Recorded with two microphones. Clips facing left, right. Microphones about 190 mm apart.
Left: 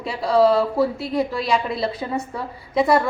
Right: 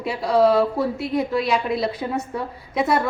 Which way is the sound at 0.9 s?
30° left (ahead or behind).